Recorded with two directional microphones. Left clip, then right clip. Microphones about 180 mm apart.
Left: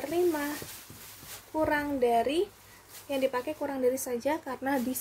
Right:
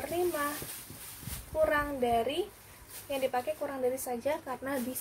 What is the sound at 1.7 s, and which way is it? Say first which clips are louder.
A woman's voice: left 3 dB; 55° left (ahead or behind).